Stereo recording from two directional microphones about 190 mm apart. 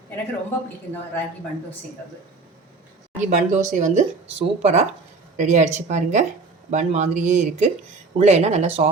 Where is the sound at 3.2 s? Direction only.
40° right (ahead or behind).